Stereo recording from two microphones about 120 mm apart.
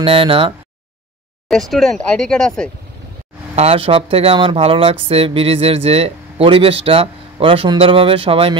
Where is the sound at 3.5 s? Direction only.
55° right (ahead or behind).